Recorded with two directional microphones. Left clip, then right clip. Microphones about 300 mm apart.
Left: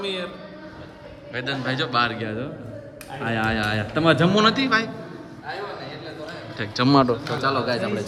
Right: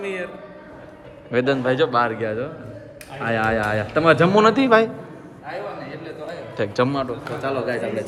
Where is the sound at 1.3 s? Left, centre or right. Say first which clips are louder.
Right 7 dB; centre.